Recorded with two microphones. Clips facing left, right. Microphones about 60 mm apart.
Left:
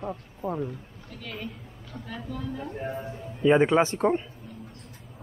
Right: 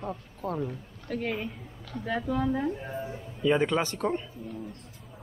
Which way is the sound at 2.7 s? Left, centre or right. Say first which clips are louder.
Left 1 dB; left.